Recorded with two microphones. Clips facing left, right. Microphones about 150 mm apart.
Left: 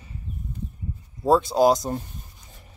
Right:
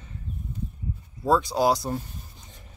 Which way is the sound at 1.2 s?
25° left (ahead or behind).